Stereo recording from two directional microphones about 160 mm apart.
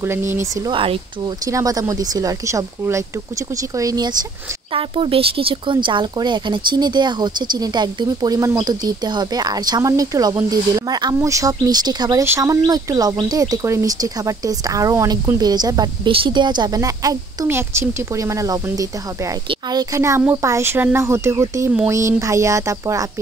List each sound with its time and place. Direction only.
0.0 s speech: 15° right (ahead or behind)
0.7 s speech: 35° right (ahead or behind)
1.4 s speech: 20° right (ahead or behind)